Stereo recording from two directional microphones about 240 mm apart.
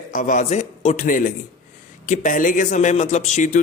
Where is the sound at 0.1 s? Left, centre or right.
Left.